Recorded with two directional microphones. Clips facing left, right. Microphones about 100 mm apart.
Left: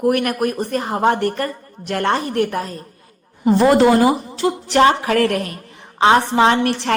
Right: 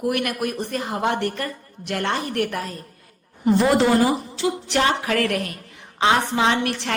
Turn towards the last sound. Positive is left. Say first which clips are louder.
# left 6 dB
turn(degrees=40)  # may be behind; listen again after turning